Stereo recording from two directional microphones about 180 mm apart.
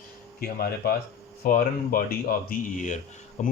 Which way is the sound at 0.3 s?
60° left (ahead or behind).